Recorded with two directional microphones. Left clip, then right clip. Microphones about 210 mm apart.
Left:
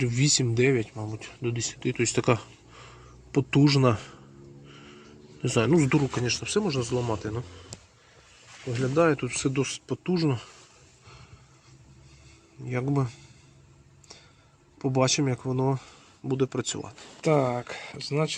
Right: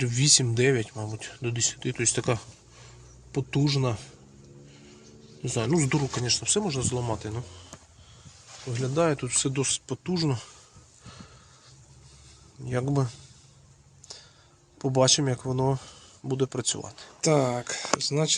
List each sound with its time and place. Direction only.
0.0 s speech: 5° right (ahead or behind); by 4.1 s 15° left (ahead or behind)
5.4 s speech: 15° left (ahead or behind)
5.6 s speech: 5° left (ahead or behind)
8.7 s speech: 10° right (ahead or behind)
12.6 s speech: 15° right (ahead or behind)
14.8 s speech: 10° right (ahead or behind)